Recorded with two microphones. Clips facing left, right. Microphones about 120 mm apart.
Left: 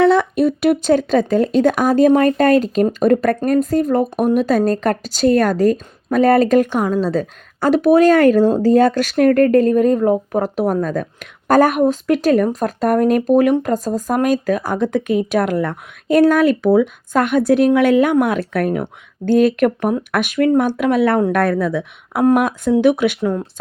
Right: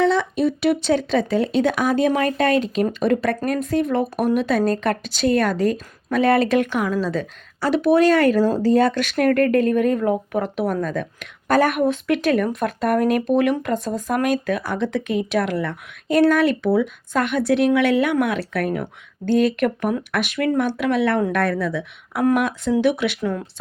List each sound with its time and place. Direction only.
0.0 s speech: 55° left (ahead or behind)